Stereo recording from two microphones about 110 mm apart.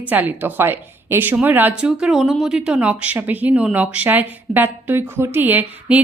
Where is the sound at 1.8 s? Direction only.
5° right (ahead or behind).